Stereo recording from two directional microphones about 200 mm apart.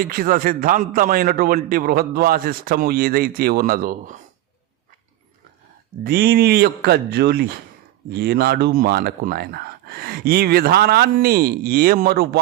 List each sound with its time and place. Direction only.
0.0 s speech: 45° right (ahead or behind)
6.0 s speech: 50° right (ahead or behind)